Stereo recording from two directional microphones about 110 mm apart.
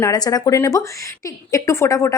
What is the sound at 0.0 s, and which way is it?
Speech, 35° left (ahead or behind).